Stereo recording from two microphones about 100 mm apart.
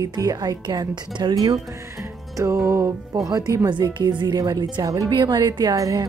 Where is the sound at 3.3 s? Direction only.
35° right (ahead or behind).